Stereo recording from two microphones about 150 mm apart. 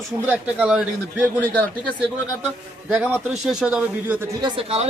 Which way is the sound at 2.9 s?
5° right (ahead or behind).